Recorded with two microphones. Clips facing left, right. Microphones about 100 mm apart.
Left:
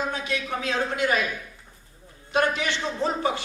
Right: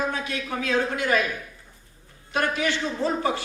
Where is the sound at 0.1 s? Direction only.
25° left (ahead or behind).